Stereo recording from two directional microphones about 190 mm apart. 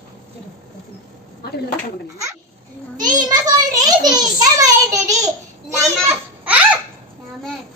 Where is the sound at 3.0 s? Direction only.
20° right (ahead or behind).